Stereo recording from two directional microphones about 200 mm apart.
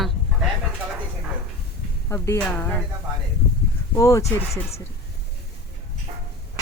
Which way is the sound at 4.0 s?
15° left (ahead or behind).